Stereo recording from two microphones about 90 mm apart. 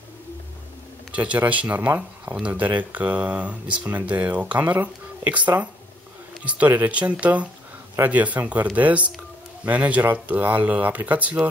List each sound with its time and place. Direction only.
1.1 s speech: 15° right (ahead or behind)